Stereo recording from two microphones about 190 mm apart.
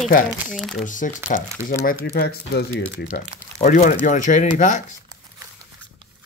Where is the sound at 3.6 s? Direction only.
45° left (ahead or behind).